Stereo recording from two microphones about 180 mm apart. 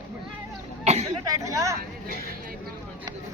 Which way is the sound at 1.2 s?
20° right (ahead or behind).